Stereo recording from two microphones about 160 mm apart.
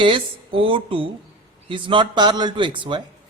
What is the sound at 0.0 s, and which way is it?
A man's voice, 30° right (ahead or behind).